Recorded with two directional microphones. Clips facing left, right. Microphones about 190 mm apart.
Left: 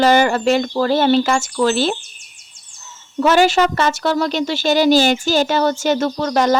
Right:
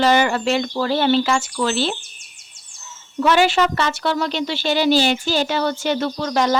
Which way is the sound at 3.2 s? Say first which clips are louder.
Left 3 dB; 40° left (ahead or behind).